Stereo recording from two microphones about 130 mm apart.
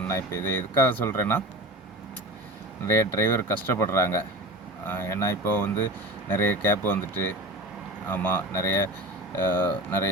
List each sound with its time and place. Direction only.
0.1 s speech: 20° left (ahead or behind)
2.8 s speech: 20° left (ahead or behind)
8.0 s speech: 15° left (ahead or behind)